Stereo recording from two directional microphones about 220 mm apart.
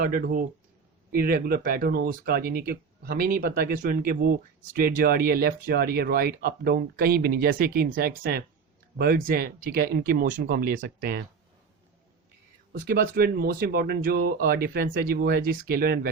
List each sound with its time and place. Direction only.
0.0 s speech: 40° right (ahead or behind)
12.9 s speech: 45° right (ahead or behind)